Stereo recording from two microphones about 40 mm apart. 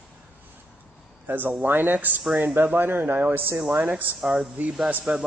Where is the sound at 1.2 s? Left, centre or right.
Right.